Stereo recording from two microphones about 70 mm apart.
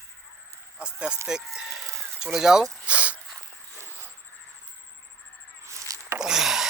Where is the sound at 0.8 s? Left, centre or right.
Centre.